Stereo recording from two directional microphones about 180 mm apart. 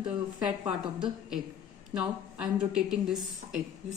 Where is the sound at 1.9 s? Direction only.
5° right (ahead or behind).